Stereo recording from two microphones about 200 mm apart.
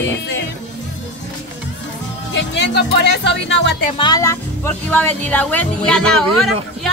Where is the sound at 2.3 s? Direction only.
65° left (ahead or behind).